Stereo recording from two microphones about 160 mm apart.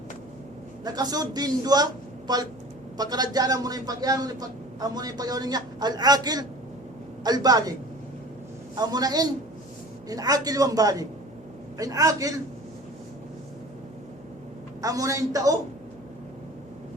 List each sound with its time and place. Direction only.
0.9 s a man's voice: 25° right (ahead or behind)
8.7 s a man's voice: 25° right (ahead or behind)
14.8 s a man's voice: 20° right (ahead or behind)